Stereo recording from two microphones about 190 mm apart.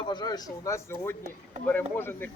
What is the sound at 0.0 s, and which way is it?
Speech, 25° left (ahead or behind).